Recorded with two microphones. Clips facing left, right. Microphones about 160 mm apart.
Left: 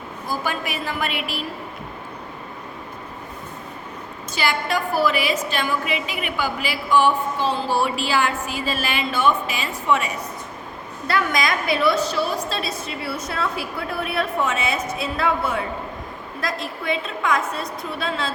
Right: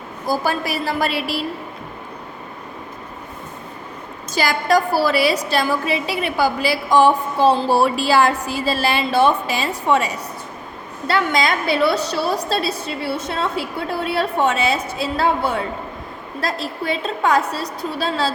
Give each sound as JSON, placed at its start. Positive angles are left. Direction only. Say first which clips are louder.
{"t": 0.3, "sound": "a woman's voice", "louder": "right 6 dB", "side_deg": -35}
{"t": 4.4, "sound": "a woman's voice", "louder": "right 6 dB", "side_deg": -40}